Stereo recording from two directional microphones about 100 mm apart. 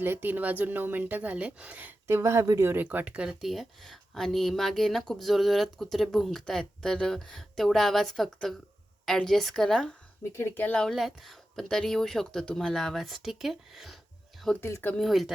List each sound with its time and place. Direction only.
0.0 s speech: 20° right (ahead or behind); by 9.9 s 5° left (ahead or behind)
10.3 s speech: 25° left (ahead or behind)
10.7 s speech: 5° left (ahead or behind)
14.6 s speech: 25° left (ahead or behind)
14.9 s speech: centre (ahead or behind)